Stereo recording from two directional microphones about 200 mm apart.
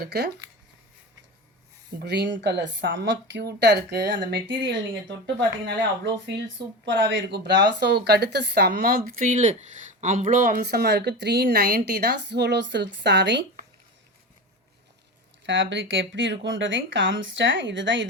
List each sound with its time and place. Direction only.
0.0 s speech: 55° right (ahead or behind)
2.0 s speech: 55° right (ahead or behind)
6.8 s speech: 65° right (ahead or behind)
15.4 s speech: 65° right (ahead or behind)